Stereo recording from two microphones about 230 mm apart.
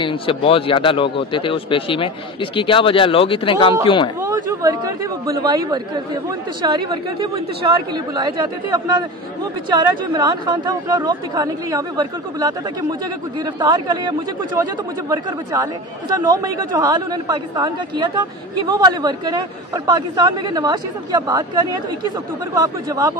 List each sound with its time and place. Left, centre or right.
0.0 s a man's voice: left
4.2 s speech: centre
9.7 s speech: centre
13.6 s speech: centre
22.6 s speech: centre